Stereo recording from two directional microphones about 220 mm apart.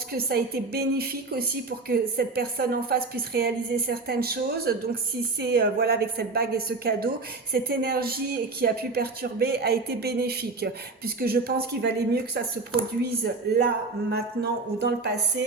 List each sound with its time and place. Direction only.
0.1 s a woman's voice: 45° right (ahead or behind)
13.6 s a woman's voice: 50° right (ahead or behind)